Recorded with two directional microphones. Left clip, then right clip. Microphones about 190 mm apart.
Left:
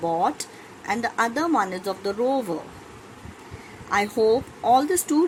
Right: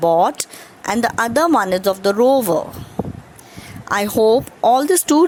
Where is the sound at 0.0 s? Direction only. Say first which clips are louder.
Right 9 dB; 50° right (ahead or behind).